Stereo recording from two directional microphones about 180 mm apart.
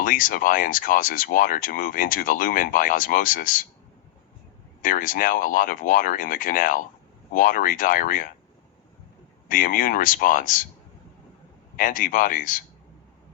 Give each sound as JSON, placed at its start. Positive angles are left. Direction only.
{"t": 0.0, "sound": "speech", "side_deg": 50}
{"t": 4.8, "sound": "speech", "side_deg": 50}
{"t": 9.5, "sound": "speech", "side_deg": 50}
{"t": 11.8, "sound": "speech", "side_deg": 50}